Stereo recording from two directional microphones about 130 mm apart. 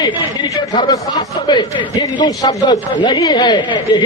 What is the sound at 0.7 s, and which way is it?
A man's voice, 30° left (ahead or behind).